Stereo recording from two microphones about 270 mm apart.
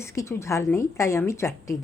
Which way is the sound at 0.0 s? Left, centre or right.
Centre.